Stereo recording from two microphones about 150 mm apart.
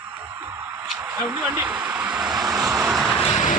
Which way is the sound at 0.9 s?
10° right (ahead or behind).